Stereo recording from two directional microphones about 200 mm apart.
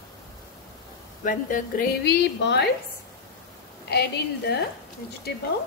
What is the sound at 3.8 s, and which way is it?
Speech, 55° left (ahead or behind).